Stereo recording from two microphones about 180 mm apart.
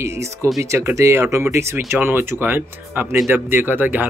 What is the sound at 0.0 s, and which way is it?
Speech, 15° right (ahead or behind).